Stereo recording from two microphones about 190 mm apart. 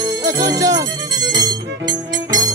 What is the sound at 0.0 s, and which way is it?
Music, 20° right (ahead or behind).